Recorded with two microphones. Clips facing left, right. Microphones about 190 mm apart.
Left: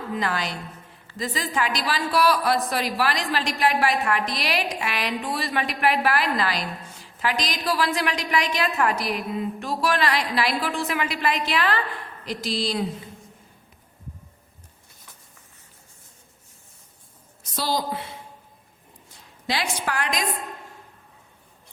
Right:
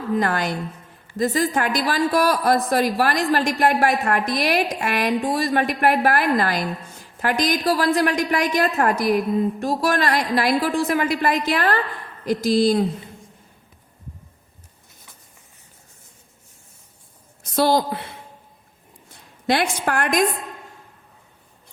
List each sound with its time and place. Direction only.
0.1 s a man's voice: 50° right (ahead or behind)
17.4 s a woman's voice: 55° right (ahead or behind)
19.1 s a woman's voice: 55° right (ahead or behind)